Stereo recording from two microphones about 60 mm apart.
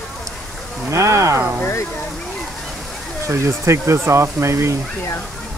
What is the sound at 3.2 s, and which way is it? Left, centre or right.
Speech, right.